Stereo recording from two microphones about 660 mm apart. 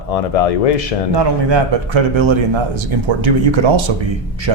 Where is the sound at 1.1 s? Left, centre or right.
Right.